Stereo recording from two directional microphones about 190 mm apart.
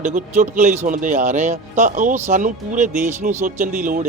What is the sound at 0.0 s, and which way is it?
Speech, 40° right (ahead or behind).